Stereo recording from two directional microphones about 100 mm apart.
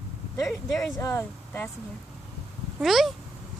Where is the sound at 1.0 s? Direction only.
25° left (ahead or behind).